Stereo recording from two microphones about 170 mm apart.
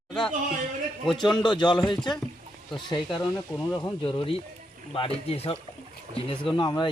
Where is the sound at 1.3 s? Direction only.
25° left (ahead or behind).